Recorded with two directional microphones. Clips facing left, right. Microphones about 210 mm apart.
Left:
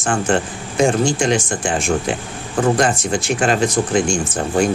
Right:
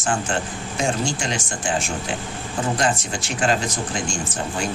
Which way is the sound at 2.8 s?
55° left (ahead or behind).